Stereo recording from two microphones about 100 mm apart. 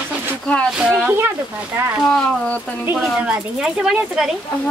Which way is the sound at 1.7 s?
25° right (ahead or behind).